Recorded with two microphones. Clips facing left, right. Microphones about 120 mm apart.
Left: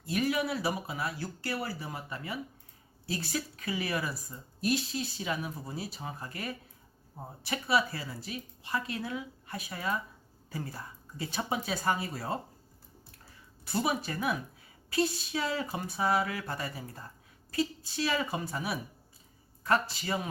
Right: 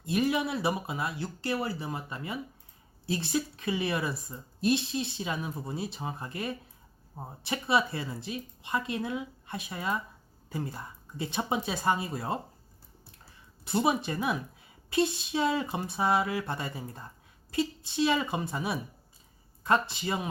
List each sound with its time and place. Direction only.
0.0 s speech: 25° right (ahead or behind)
13.7 s speech: 25° right (ahead or behind)